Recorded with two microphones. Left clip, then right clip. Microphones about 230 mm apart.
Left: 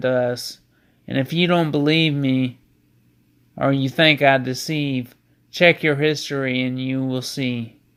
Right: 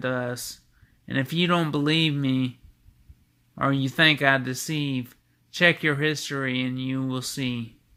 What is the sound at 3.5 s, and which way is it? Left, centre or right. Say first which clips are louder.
Speech: left 4 dB; centre.